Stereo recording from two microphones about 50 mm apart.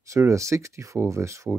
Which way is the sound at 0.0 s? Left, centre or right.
Right.